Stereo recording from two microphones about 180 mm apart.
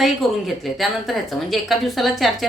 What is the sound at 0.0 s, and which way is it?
A woman's voice, centre (ahead or behind).